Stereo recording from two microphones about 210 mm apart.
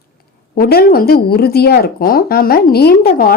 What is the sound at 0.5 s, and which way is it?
Speech, 45° left (ahead or behind).